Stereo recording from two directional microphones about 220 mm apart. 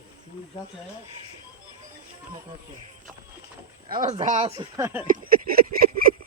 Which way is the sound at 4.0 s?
35° right (ahead or behind).